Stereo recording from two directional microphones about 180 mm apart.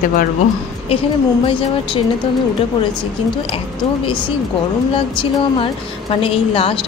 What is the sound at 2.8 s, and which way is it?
A woman's voice, 30° left (ahead or behind).